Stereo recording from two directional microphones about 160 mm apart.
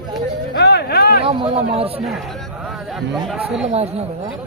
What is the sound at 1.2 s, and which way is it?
Speech, 35° right (ahead or behind).